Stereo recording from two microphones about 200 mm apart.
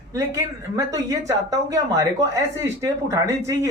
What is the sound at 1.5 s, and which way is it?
Speech, 15° right (ahead or behind).